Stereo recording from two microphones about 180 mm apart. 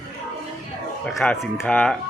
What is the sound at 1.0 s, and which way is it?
Speech, 5° left (ahead or behind).